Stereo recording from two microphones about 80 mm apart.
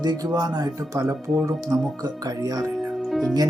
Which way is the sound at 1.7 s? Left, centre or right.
Right.